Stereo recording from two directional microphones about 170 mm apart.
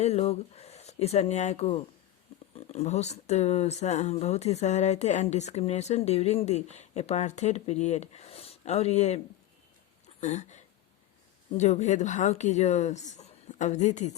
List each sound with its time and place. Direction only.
0.0 s speech: 40° left (ahead or behind)